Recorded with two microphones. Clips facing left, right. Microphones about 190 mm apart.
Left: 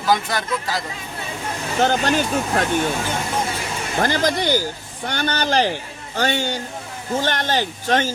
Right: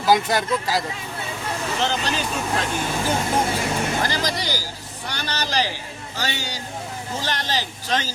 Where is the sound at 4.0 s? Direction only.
55° left (ahead or behind).